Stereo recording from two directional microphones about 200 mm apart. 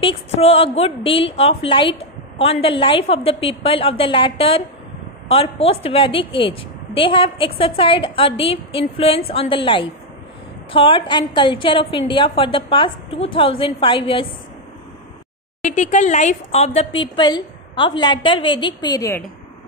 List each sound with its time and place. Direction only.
0.0 s a woman's voice: 30° left (ahead or behind)
15.6 s a woman's voice: 35° left (ahead or behind); by 19.2 s 15° left (ahead or behind)